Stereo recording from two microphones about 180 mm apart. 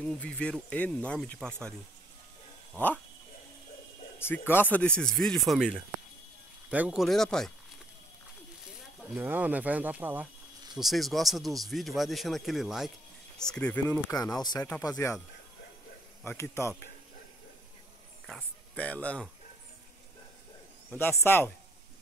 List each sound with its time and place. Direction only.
0.0 s speech: 5° left (ahead or behind)
4.2 s speech: 10° left (ahead or behind)
9.1 s speech: 10° right (ahead or behind); by 13.9 s 10° left (ahead or behind)
14.2 s speech: 20° left (ahead or behind)
16.3 s speech: 15° left (ahead or behind)
18.2 s speech: 5° left (ahead or behind)
21.0 s speech: 15° left (ahead or behind)